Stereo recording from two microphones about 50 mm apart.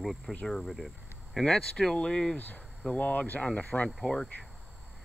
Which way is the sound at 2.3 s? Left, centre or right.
Left.